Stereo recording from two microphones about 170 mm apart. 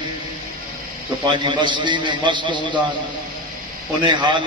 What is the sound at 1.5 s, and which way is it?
A man's voice, 30° right (ahead or behind).